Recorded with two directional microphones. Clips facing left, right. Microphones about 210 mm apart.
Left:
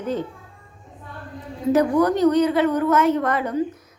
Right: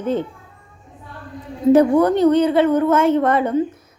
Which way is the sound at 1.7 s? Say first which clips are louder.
Right 5 dB; 25° right (ahead or behind).